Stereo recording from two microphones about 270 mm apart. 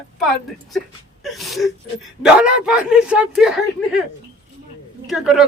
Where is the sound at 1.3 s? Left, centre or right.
Centre.